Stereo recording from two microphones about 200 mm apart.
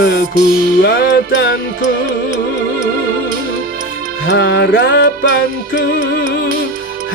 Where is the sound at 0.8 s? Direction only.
60° left (ahead or behind).